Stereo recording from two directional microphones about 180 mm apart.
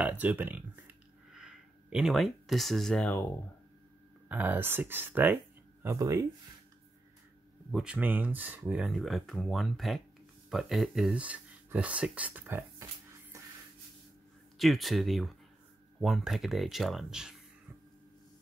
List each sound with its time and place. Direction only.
0.0 s speech: 10° right (ahead or behind); by 3.3 s 10° left (ahead or behind)
4.3 s speech: 10° right (ahead or behind)
7.7 s speech: 5° right (ahead or behind)
13.3 s a sound: 15° right (ahead or behind)
14.6 s speech: centre (ahead or behind)